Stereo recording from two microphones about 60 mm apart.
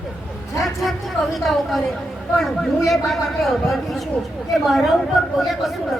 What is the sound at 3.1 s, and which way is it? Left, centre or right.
Speech, centre.